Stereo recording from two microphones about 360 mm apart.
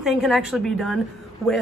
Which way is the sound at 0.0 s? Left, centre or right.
Centre.